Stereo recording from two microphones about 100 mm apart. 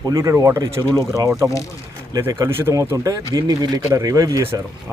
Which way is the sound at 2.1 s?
35° right (ahead or behind).